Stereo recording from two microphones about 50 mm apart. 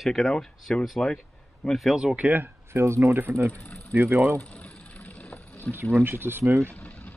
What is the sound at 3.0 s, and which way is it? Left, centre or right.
Speech, right.